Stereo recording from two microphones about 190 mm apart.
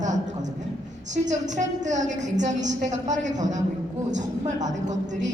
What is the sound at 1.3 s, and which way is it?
A woman's voice, 40° right (ahead or behind).